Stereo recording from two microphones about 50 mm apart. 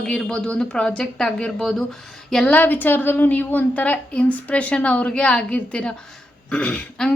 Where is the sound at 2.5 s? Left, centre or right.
Left.